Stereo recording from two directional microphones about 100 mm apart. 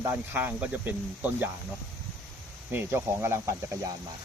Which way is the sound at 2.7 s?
25° right (ahead or behind).